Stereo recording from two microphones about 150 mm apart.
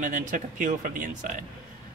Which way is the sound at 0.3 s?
60° right (ahead or behind).